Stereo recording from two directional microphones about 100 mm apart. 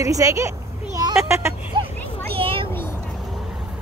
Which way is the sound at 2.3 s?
65° right (ahead or behind).